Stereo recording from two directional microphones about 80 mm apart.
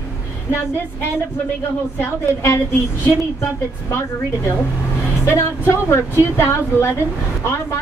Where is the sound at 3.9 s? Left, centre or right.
Left.